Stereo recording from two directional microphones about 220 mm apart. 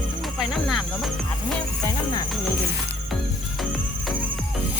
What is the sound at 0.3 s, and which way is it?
Insect, centre (ahead or behind).